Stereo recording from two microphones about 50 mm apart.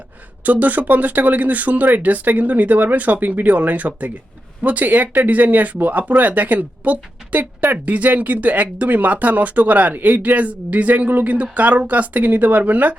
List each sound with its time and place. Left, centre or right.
0.4 s speech: right